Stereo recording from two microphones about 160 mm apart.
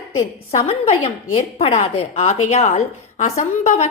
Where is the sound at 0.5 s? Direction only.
40° left (ahead or behind).